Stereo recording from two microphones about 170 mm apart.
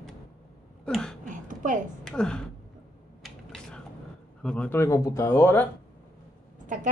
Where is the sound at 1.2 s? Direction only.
50° right (ahead or behind).